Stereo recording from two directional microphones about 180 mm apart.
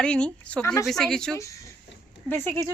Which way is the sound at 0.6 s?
15° left (ahead or behind).